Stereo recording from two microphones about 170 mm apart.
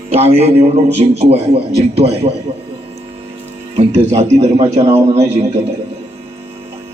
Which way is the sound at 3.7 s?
40° right (ahead or behind).